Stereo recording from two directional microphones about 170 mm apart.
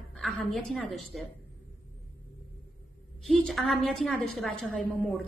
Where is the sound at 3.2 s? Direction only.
Centre (ahead or behind).